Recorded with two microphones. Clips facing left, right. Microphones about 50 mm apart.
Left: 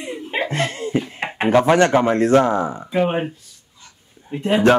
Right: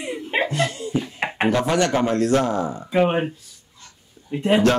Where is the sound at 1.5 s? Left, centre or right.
Left.